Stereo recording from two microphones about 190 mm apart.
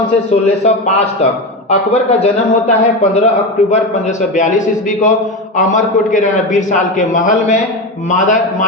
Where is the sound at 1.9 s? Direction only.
35° left (ahead or behind).